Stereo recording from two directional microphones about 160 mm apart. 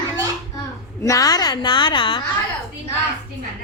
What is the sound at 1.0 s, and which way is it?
A woman's voice, 20° left (ahead or behind).